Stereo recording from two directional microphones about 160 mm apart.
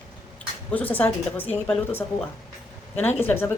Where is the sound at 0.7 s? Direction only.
10° left (ahead or behind).